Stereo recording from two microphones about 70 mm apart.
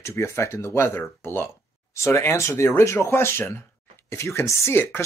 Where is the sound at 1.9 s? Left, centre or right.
Left.